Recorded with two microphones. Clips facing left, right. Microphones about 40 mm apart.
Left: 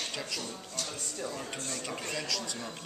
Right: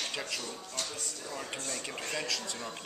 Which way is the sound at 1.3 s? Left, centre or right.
Centre.